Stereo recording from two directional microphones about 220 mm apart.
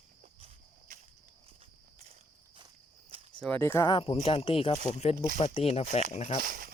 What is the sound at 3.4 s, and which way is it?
Speech, 10° left (ahead or behind).